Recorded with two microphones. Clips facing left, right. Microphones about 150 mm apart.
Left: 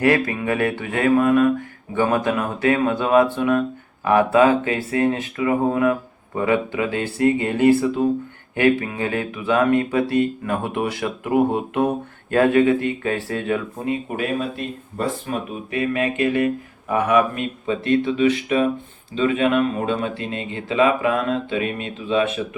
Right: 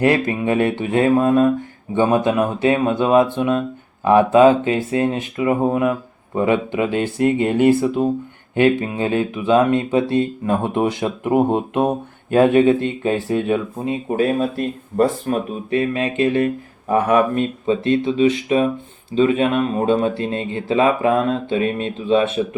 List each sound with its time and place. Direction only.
0.0 s speech: 25° right (ahead or behind)
14.5 s speech: 45° right (ahead or behind)
15.7 s speech: 25° right (ahead or behind)